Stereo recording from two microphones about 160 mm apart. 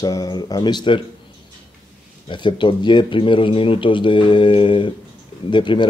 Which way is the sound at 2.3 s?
30° left (ahead or behind).